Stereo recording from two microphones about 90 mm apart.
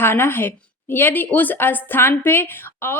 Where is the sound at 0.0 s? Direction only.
25° left (ahead or behind).